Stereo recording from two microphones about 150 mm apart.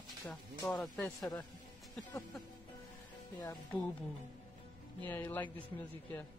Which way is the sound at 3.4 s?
25° left (ahead or behind).